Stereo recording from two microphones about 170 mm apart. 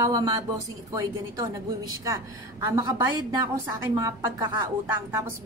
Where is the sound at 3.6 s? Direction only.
20° right (ahead or behind).